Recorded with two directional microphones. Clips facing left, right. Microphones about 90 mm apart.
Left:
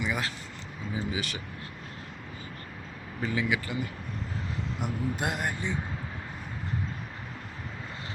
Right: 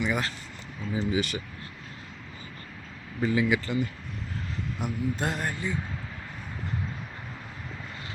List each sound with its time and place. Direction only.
0.0 s speech: centre (ahead or behind)
3.2 s speech: 5° right (ahead or behind)
4.8 s speech: 15° left (ahead or behind)